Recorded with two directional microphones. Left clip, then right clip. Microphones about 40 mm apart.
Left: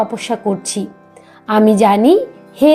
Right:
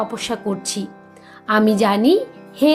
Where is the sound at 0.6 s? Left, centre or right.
Left.